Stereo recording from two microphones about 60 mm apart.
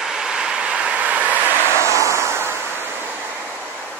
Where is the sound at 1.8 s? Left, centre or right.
Right.